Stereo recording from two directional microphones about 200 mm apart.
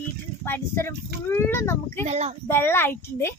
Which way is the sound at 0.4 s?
10° left (ahead or behind).